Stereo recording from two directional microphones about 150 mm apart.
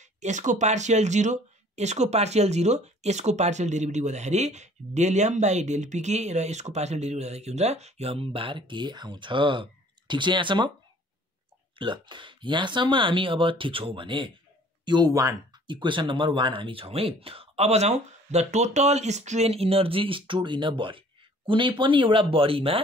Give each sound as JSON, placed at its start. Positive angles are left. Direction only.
{"t": 0.0, "sound": "speech", "side_deg": -55}
{"t": 11.8, "sound": "speech", "side_deg": -30}